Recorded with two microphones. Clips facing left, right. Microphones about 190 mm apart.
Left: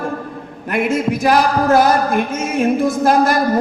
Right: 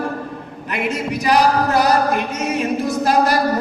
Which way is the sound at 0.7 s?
50° left (ahead or behind).